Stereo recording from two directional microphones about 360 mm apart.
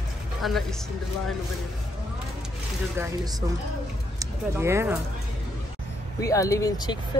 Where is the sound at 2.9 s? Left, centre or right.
Centre.